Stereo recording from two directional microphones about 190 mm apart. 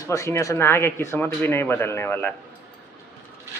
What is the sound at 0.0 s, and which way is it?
Speech, 15° left (ahead or behind).